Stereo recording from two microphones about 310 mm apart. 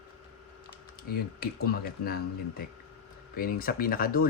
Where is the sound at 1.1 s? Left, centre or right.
Left.